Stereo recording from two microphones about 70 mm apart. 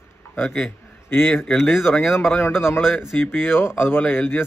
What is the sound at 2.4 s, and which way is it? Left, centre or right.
A man's voice, left.